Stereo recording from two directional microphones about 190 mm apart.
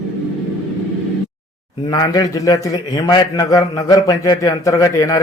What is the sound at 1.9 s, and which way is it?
A man's voice, 20° left (ahead or behind).